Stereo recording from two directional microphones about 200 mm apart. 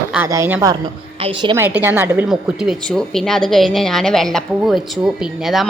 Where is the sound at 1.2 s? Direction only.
25° right (ahead or behind).